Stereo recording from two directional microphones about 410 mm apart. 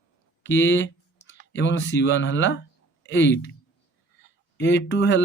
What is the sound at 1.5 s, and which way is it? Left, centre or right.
Speech, left.